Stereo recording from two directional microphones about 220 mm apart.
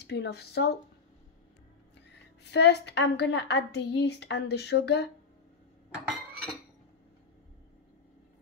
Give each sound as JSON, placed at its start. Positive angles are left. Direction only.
{"t": 0.0, "sound": "a woman's voice", "side_deg": 50}
{"t": 2.5, "sound": "a woman's voice", "side_deg": 50}
{"t": 5.9, "sound": "a sound", "side_deg": 0}